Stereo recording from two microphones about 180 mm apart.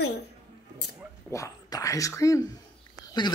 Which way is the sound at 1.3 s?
20° left (ahead or behind).